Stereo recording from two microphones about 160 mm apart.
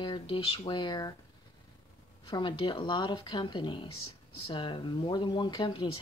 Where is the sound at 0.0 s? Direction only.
30° left (ahead or behind).